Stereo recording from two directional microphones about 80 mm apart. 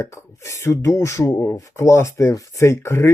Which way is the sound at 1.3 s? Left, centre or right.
Left.